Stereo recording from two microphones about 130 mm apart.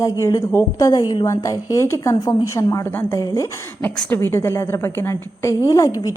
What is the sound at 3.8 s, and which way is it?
A woman's voice, 15° left (ahead or behind).